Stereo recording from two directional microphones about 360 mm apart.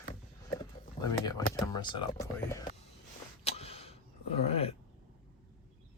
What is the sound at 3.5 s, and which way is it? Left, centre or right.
Vehicle, centre.